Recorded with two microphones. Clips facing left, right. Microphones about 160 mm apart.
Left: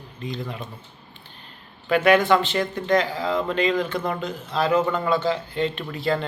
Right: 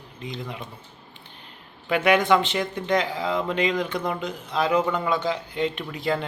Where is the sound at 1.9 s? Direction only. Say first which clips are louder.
Left 2 dB; 20° right (ahead or behind).